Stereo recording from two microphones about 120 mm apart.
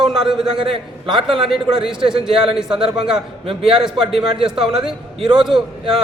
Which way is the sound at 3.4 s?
50° right (ahead or behind).